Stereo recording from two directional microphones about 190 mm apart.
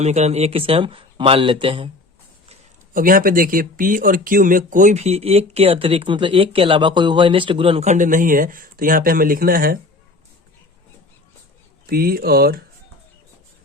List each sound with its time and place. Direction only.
0.0 s speech: 35° right (ahead or behind)
2.9 s speech: 45° right (ahead or behind)
11.9 s speech: 50° right (ahead or behind)